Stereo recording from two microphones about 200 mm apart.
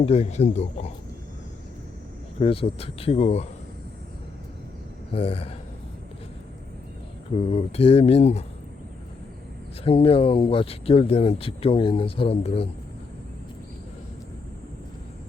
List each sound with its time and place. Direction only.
0.0 s speech: 30° left (ahead or behind)
2.4 s speech: 30° left (ahead or behind)
5.1 s speech: 30° left (ahead or behind)
7.3 s speech: 30° left (ahead or behind)
9.8 s speech: 30° left (ahead or behind)